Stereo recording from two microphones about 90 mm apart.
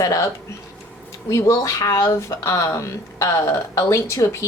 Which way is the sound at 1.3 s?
35° left (ahead or behind).